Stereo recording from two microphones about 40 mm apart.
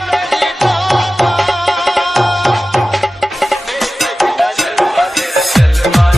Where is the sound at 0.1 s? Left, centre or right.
Centre.